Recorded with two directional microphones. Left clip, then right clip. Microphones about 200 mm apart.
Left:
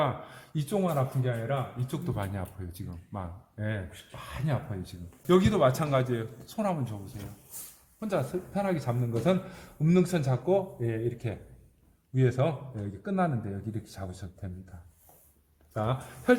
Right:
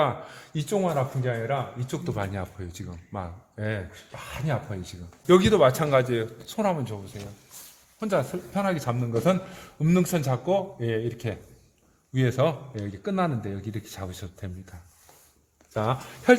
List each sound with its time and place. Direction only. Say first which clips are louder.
0.0 s speech: right 5 dB; 35° right (ahead or behind)
5.2 s speech: right 5 dB; 40° right (ahead or behind)
7.9 s speech: right 5 dB; 35° right (ahead or behind)
15.7 s speech: right 5 dB; 40° right (ahead or behind)